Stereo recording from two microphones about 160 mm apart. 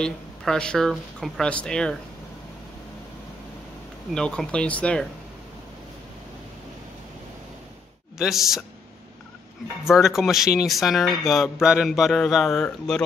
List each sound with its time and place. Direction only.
0.0 s speech: 5° left (ahead or behind)
4.1 s speech: 5° left (ahead or behind)
8.2 s speech: centre (ahead or behind)
9.8 s speech: centre (ahead or behind)